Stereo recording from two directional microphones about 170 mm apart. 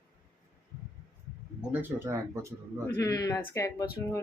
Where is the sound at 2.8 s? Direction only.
20° left (ahead or behind).